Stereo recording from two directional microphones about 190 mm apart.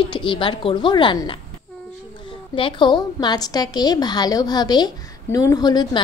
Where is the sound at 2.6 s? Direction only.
25° left (ahead or behind).